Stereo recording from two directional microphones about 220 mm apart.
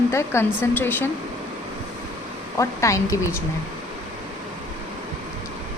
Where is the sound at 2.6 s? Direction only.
15° left (ahead or behind).